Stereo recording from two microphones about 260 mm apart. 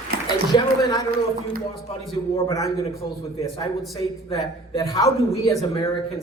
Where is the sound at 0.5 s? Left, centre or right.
Centre.